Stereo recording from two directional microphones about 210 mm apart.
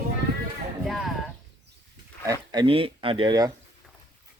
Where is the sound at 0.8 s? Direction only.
Centre (ahead or behind).